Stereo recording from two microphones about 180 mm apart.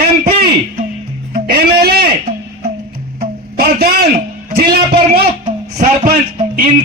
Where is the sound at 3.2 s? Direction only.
55° right (ahead or behind).